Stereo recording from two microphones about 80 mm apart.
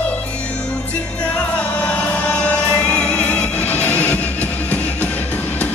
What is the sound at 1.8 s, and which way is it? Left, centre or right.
Music, centre.